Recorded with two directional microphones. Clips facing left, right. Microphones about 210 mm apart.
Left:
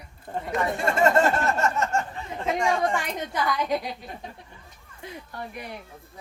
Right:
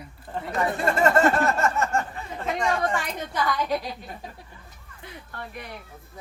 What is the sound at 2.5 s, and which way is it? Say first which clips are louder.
Speech: left 1 dB; 10° left (ahead or behind).